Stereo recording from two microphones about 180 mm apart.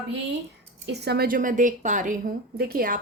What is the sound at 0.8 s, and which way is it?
A woman's voice, 70° right (ahead or behind).